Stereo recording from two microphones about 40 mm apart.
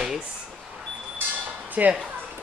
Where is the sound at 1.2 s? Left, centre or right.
Right.